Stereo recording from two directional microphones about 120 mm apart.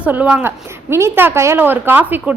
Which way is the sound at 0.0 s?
15° right (ahead or behind).